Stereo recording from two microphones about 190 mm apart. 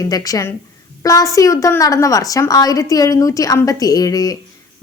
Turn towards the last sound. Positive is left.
turn(degrees=20)  # may be behind; listen again after turning